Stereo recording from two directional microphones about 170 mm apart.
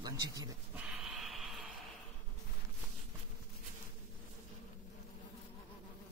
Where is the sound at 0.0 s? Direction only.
20° right (ahead or behind).